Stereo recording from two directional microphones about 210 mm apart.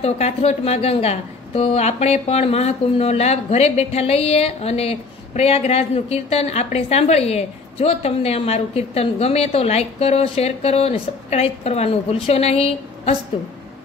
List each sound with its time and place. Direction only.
0.0 s a woman's voice: 30° left (ahead or behind)